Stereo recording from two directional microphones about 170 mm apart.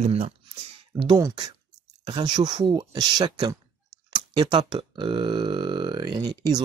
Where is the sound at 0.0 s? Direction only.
40° right (ahead or behind).